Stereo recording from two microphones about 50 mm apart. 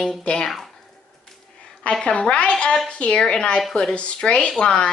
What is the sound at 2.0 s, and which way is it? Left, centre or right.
Speech, left.